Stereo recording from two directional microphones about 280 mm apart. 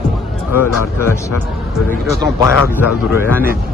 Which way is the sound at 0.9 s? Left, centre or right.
Centre.